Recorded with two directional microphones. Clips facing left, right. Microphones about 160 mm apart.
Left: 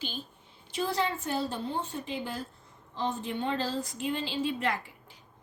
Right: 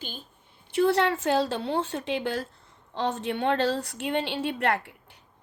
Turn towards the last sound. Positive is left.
turn(degrees=-65)  # may be behind; listen again after turning